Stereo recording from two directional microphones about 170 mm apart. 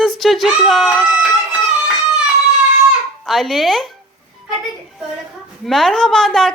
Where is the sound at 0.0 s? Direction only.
Centre (ahead or behind).